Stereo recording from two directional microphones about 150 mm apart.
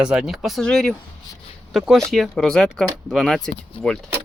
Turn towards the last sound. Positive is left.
turn(degrees=40)  # may be behind; listen again after turning